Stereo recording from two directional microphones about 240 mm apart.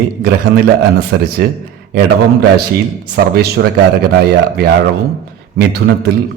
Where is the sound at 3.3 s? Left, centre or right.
Right.